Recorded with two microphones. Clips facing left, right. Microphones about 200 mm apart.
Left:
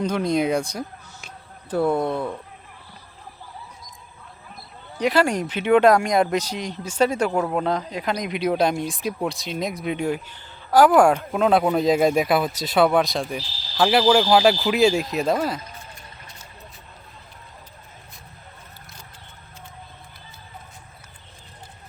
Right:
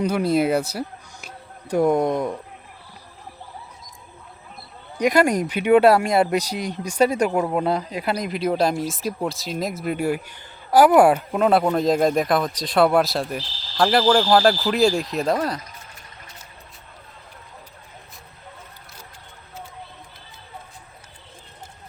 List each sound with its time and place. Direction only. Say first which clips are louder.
0.0 s speech: right 2 dB; 5° right (ahead or behind)
4.9 s a woman's voice: right 2 dB; 10° right (ahead or behind)